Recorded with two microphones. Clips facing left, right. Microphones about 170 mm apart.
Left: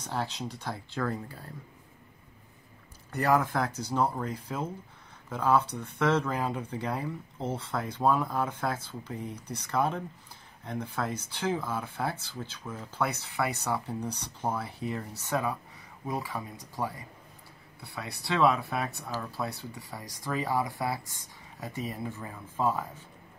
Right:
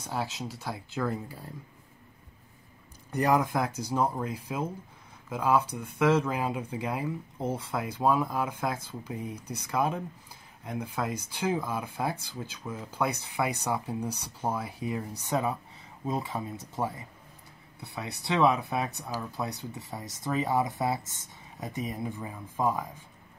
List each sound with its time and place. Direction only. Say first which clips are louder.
0.0 s speech: even; 10° right (ahead or behind)
3.1 s speech: right 1 dB; 15° right (ahead or behind)